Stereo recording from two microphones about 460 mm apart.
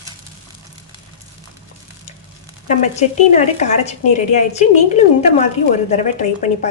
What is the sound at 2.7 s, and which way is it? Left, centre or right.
A woman's voice, centre.